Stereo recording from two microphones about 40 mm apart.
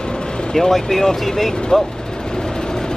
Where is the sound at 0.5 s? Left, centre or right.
Centre.